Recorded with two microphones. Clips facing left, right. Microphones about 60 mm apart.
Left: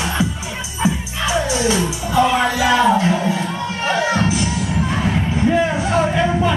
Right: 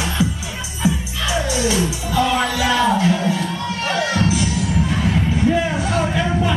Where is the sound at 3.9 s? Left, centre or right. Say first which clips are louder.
Left 2 dB; left.